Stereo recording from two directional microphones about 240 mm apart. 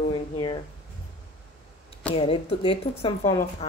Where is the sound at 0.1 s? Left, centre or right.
Left.